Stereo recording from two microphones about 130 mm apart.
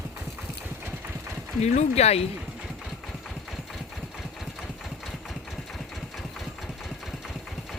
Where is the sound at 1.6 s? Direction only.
60° left (ahead or behind).